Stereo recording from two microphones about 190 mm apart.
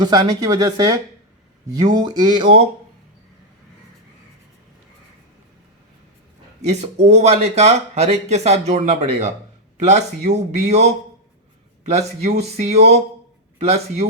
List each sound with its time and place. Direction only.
0.0 s speech: 20° right (ahead or behind)
6.6 s speech: 35° right (ahead or behind)